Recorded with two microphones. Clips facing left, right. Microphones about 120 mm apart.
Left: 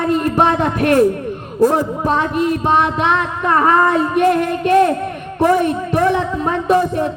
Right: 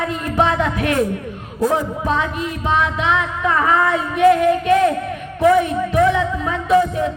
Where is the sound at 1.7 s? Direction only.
50° left (ahead or behind).